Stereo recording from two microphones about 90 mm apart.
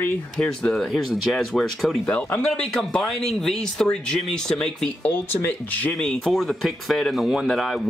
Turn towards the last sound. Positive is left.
turn(degrees=0)  # may be behind; listen again after turning